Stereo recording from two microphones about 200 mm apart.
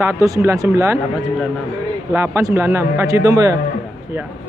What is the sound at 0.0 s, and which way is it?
Speech, 15° right (ahead or behind).